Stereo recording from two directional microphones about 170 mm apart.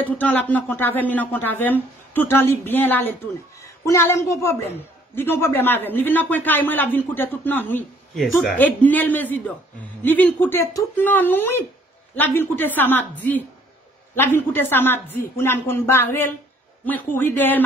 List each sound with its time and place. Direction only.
0.0 s speech: 10° left (ahead or behind)